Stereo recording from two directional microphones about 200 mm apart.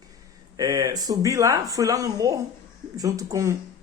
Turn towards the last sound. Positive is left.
turn(degrees=-15)  # may be behind; listen again after turning